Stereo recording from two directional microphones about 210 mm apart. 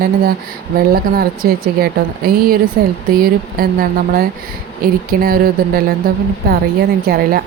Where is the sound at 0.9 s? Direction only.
45° right (ahead or behind).